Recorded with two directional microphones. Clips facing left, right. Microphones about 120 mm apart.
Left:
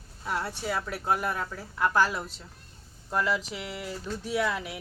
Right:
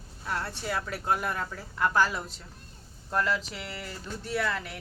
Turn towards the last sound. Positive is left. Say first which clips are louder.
# left 2 dB
turn(degrees=10)  # may be behind; listen again after turning